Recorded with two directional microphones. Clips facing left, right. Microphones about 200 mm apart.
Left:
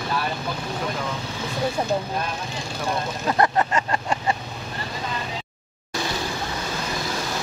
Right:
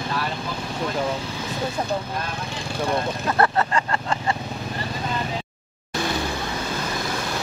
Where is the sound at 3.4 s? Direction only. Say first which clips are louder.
Even; 20° left (ahead or behind).